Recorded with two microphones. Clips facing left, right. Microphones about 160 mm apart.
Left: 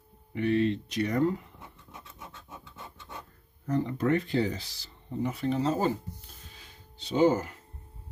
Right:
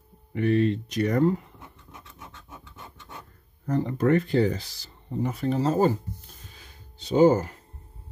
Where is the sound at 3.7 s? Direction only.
45° right (ahead or behind).